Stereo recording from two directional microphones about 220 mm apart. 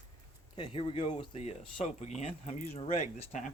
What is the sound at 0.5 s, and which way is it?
Speech, 25° left (ahead or behind).